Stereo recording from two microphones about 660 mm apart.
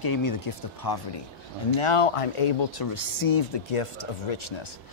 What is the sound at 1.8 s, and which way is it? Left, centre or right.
Speech, left.